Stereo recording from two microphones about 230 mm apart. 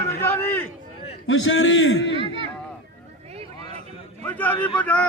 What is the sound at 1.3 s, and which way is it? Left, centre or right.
Speech, left.